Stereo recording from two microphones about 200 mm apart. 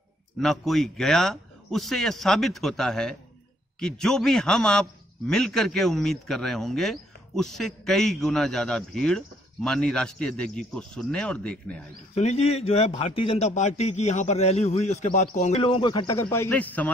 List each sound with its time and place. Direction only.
0.4 s a man's voice: centre (ahead or behind)
12.2 s a man's voice: 30° left (ahead or behind); by 16.9 s 10° left (ahead or behind)